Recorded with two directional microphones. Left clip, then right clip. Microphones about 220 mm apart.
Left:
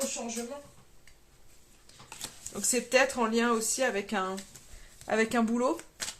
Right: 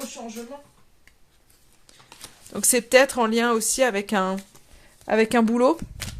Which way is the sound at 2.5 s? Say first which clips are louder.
Right 9 dB; 45° right (ahead or behind).